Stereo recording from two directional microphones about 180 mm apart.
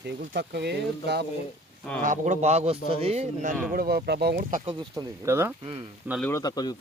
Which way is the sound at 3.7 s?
55° right (ahead or behind).